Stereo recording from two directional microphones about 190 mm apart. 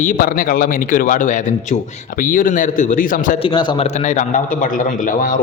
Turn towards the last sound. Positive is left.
turn(degrees=45)  # may be behind; listen again after turning